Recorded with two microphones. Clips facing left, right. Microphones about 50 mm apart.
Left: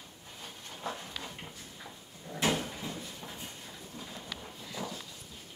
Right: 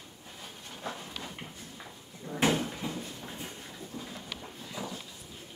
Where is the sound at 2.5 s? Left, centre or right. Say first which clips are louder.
Right 2 dB; centre.